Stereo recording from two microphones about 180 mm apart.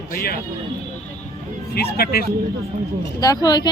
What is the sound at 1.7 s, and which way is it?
Speech, 60° left (ahead or behind).